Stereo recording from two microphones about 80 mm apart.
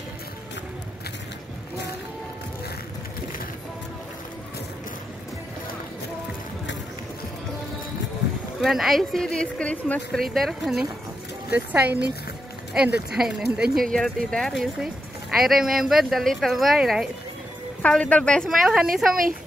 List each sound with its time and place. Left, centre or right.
8.5 s speech: centre
10.1 s speech: centre
11.5 s speech: centre
13.9 s speech: centre
17.8 s speech: centre
18.5 s speech: centre